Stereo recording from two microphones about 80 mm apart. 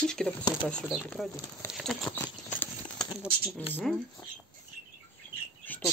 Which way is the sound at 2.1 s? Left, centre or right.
Left.